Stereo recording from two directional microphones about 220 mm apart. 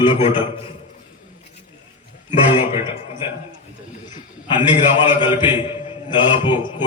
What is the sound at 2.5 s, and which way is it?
Speech, 20° left (ahead or behind).